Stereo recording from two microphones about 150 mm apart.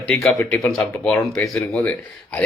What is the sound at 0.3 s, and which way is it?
Speech, 20° left (ahead or behind).